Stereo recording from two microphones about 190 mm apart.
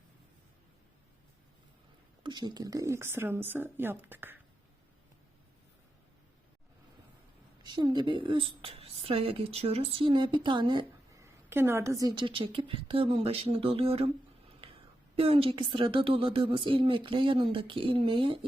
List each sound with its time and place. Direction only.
2.2 s speech: 20° right (ahead or behind)
7.6 s a woman's voice: 25° right (ahead or behind)
15.1 s a woman's voice: 30° right (ahead or behind)